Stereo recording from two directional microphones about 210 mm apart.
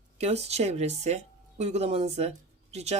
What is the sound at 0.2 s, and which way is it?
A woman's voice, 30° right (ahead or behind).